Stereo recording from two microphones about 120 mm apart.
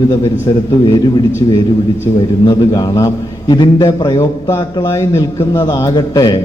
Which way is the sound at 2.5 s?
30° left (ahead or behind).